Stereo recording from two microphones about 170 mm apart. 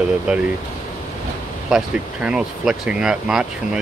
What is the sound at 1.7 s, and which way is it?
Speech, 5° right (ahead or behind).